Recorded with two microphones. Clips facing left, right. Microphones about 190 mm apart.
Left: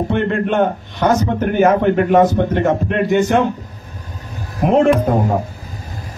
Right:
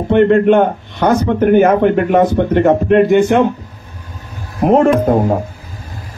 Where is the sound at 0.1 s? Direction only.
60° right (ahead or behind).